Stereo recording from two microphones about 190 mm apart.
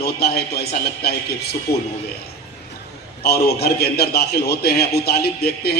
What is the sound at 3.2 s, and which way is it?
A man's voice, 55° left (ahead or behind).